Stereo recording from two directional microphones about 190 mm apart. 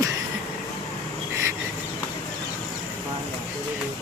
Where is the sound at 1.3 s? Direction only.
15° right (ahead or behind).